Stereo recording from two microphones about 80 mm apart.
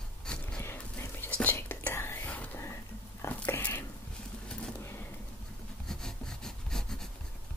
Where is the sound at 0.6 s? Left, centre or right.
Left.